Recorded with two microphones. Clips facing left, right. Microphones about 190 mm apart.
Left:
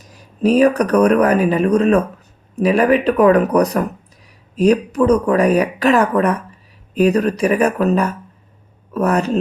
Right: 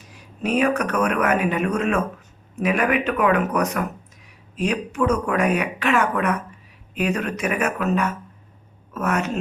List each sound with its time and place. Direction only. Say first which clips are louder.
0.0 s speech: left 10 dB; 40° left (ahead or behind)